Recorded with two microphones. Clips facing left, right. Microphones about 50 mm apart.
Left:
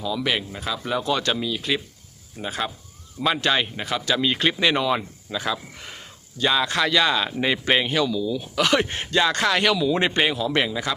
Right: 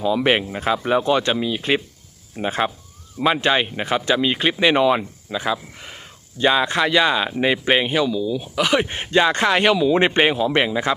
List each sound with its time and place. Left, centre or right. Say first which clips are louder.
0.0 s speech: right 7 dB; right
4.2 s speech: right 3 dB; centre
6.4 s speech: right 4 dB; right
9.0 s speech: right 5 dB; right